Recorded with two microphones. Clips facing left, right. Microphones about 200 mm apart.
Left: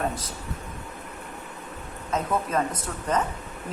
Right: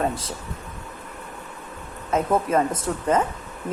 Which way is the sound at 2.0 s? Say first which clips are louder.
Right 5 dB; 25° right (ahead or behind).